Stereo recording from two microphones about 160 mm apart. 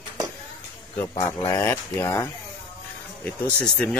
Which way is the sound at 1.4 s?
20° left (ahead or behind).